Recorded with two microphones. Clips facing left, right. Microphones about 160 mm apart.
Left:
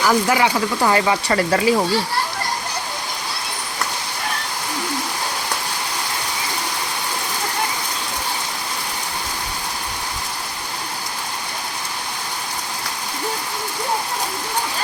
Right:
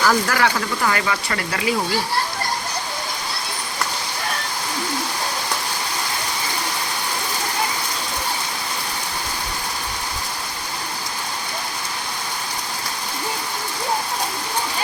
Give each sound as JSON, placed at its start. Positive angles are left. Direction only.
{"t": 0.0, "sound": "speech", "side_deg": 20}